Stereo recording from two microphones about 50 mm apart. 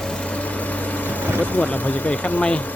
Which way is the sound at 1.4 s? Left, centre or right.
Left.